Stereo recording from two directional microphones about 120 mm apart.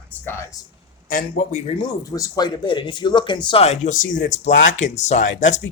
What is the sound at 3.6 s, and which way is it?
Speech, 80° left.